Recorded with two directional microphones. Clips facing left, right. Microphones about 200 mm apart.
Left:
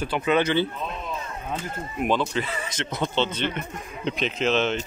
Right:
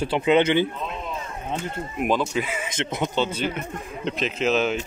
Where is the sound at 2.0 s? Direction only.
5° right (ahead or behind).